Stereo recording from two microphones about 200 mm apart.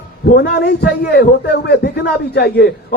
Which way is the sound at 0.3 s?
55° left (ahead or behind).